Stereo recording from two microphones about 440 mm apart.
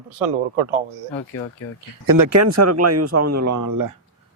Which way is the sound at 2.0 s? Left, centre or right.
Right.